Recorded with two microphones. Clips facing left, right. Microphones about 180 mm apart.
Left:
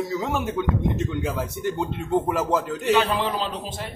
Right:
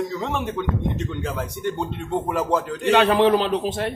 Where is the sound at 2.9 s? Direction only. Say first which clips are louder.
Right 6 dB; 65° right (ahead or behind).